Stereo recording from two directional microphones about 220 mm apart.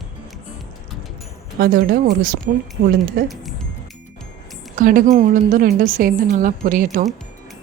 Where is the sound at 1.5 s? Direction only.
45° right (ahead or behind).